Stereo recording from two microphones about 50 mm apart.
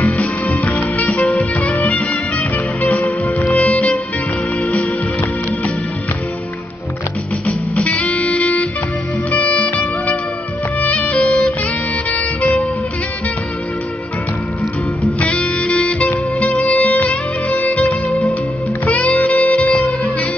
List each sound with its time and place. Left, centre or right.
0.5 s music: left
7.7 s music: left
15.1 s music: left